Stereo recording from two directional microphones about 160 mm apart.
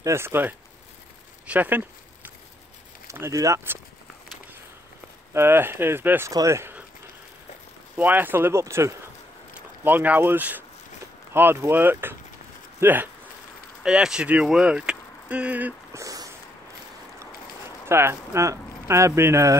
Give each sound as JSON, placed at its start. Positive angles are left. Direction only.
{"t": 0.0, "sound": "speech", "side_deg": -15}
{"t": 3.1, "sound": "speech", "side_deg": -20}
{"t": 5.3, "sound": "speech", "side_deg": -15}
{"t": 7.9, "sound": "speech", "side_deg": -10}
{"t": 17.8, "sound": "speech", "side_deg": -15}